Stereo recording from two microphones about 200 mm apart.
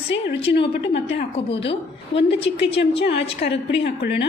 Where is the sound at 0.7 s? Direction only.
60° left (ahead or behind).